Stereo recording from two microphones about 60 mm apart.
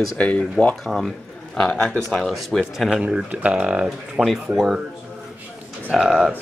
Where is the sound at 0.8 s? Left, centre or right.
Centre.